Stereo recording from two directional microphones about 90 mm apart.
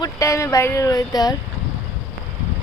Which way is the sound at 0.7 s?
40° left (ahead or behind).